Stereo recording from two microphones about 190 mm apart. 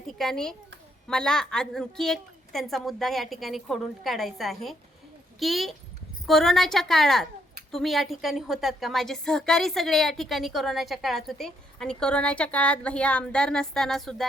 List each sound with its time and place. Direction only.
0.2 s a woman's voice: 5° left (ahead or behind)